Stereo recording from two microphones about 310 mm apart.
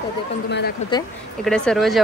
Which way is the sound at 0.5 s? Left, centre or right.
Left.